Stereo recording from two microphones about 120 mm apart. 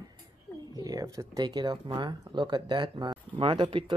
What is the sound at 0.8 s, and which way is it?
Speech, 30° right (ahead or behind).